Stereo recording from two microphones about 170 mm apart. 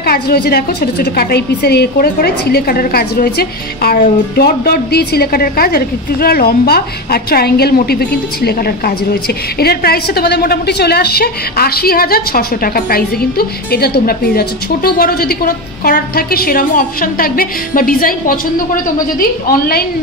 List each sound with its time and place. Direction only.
0.0 s a woman's voice: 65° left (ahead or behind)